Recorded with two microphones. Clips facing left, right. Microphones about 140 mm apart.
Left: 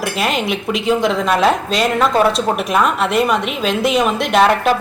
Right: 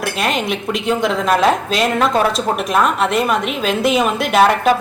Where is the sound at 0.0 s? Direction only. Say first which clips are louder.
Left 1 dB; centre (ahead or behind).